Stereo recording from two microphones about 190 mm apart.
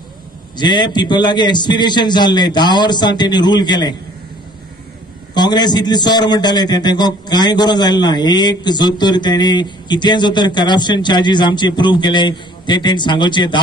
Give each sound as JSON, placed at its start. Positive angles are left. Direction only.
{"t": 0.6, "sound": "a man's voice", "side_deg": 20}
{"t": 5.3, "sound": "a man's voice", "side_deg": 20}